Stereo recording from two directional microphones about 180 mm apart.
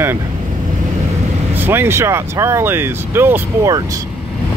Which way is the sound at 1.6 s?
10° right (ahead or behind).